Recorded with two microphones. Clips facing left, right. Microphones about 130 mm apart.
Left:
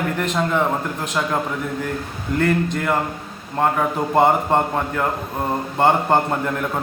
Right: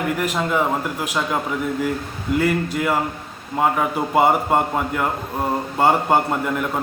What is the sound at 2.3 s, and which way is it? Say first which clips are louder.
A man's voice: left 1 dB; 5° right (ahead or behind).